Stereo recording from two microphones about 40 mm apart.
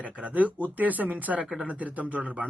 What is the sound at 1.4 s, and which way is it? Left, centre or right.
Speech, centre.